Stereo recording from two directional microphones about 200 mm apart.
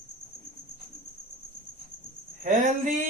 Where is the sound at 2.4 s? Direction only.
40° right (ahead or behind).